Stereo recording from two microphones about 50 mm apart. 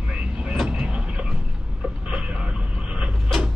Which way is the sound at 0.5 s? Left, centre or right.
Centre.